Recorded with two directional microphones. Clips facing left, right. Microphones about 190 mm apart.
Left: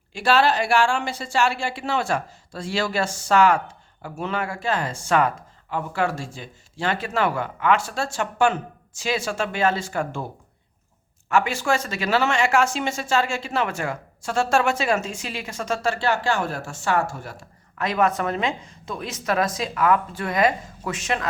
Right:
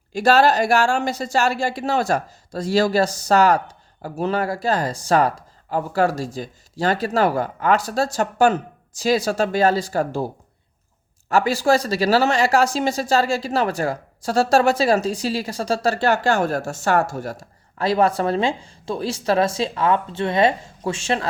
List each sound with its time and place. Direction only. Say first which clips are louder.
0.1 s speech: right 4 dB; 40° right (ahead or behind)
11.3 s speech: right 4 dB; 35° right (ahead or behind)